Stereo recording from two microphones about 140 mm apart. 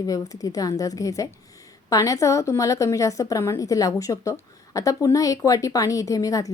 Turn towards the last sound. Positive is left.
turn(degrees=25)  # may be behind; listen again after turning